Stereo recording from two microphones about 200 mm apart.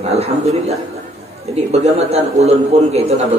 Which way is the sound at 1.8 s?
30° right (ahead or behind).